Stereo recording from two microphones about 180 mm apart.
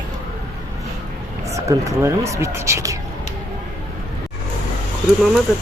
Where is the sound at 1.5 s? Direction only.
15° right (ahead or behind).